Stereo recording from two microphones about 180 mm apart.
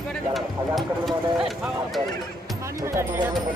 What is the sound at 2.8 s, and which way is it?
Speech, 15° right (ahead or behind).